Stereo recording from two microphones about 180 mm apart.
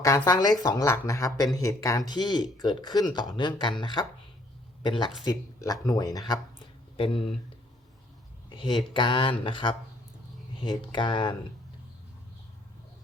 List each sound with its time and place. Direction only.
0.0 s speech: 20° left (ahead or behind)
5.2 s speech: 20° left (ahead or behind)
8.4 s speech: 25° left (ahead or behind)